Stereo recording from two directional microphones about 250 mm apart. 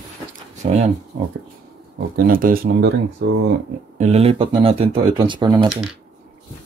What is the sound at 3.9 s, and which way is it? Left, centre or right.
Speech, right.